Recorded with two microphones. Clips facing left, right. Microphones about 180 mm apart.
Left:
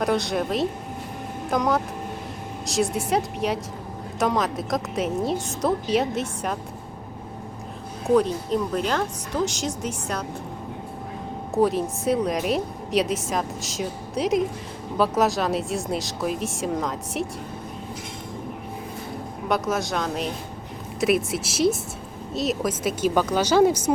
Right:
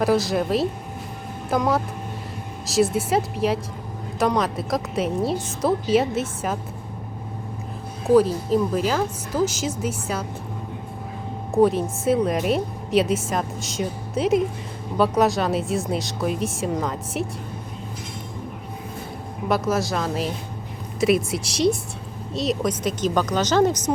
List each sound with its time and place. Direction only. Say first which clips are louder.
0.0 s speech: right 3 dB; centre (ahead or behind)
8.0 s speech: right 3 dB; centre (ahead or behind)
11.5 s speech: right 3 dB; centre (ahead or behind)
19.5 s speech: right 2 dB; centre (ahead or behind)